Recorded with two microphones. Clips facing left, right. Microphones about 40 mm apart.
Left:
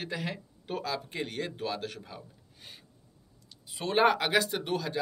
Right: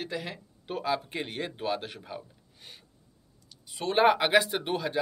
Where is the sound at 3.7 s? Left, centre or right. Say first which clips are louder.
Right 1 dB; centre.